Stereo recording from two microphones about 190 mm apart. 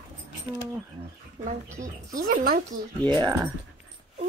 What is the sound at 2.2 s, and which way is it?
Speech, 50° right (ahead or behind).